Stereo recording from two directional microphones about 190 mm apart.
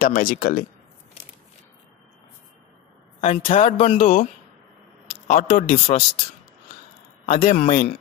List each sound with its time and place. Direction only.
0.0 s speech: 50° left (ahead or behind)
3.2 s speech: 30° left (ahead or behind)
5.3 s speech: 40° left (ahead or behind)
7.3 s speech: 35° left (ahead or behind)